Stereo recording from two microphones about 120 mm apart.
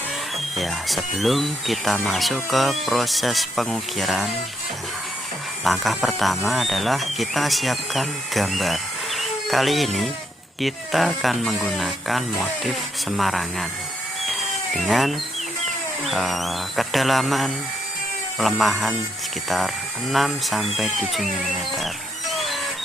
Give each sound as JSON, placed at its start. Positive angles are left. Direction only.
{"t": 0.5, "sound": "speech", "side_deg": 0}
{"t": 5.6, "sound": "speech", "side_deg": 0}
{"t": 14.3, "sound": "cat", "side_deg": 0}
{"t": 15.6, "sound": "speech", "side_deg": 0}
{"t": 22.3, "sound": "a sound", "side_deg": 0}